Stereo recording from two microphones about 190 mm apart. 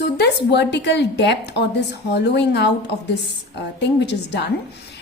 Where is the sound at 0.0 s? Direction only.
60° left (ahead or behind).